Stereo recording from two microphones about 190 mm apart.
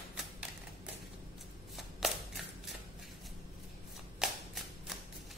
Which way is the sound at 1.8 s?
Centre (ahead or behind).